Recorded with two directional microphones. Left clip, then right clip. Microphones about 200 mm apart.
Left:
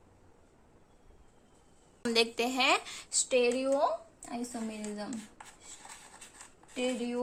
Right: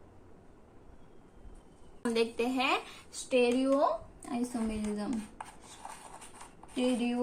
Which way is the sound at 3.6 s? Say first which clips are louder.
Right 1 dB; 35° left (ahead or behind).